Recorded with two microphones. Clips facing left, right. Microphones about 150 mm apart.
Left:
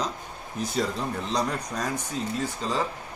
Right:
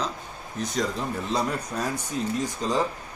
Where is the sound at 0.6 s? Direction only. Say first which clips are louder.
Even; centre (ahead or behind).